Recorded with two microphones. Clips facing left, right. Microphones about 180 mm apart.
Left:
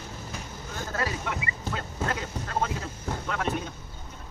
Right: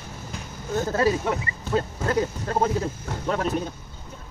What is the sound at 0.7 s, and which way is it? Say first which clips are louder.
Speech: right 10 dB; 35° right (ahead or behind).